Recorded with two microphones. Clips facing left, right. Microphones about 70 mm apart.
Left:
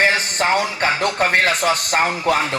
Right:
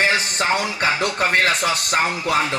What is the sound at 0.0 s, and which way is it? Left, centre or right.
Speech, left.